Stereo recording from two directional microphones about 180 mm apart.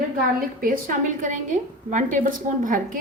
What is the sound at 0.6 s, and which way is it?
A woman's voice, 50° right (ahead or behind).